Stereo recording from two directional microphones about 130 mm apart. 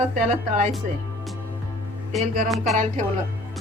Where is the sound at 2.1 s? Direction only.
Centre (ahead or behind).